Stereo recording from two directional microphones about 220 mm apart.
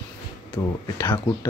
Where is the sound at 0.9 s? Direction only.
10° left (ahead or behind).